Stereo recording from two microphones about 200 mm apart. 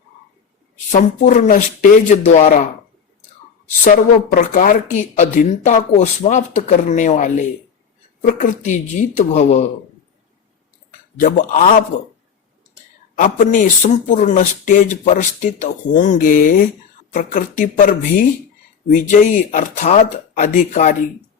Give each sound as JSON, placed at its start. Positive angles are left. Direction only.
{"t": 0.9, "sound": "speech", "side_deg": 40}
{"t": 3.8, "sound": "speech", "side_deg": 45}
{"t": 11.2, "sound": "speech", "side_deg": 40}
{"t": 13.1, "sound": "speech", "side_deg": 40}